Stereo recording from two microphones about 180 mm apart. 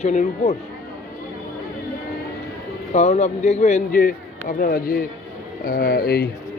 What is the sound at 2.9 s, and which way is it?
A man's voice, 40° left (ahead or behind).